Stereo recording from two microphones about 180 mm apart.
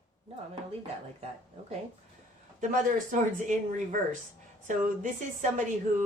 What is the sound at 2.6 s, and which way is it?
Speech, 45° right (ahead or behind).